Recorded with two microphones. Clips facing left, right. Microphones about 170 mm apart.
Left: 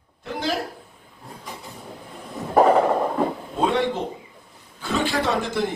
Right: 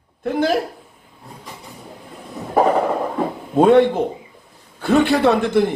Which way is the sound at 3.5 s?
55° right (ahead or behind).